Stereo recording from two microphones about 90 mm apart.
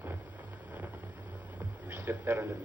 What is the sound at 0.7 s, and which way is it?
Vehicle, 20° right (ahead or behind).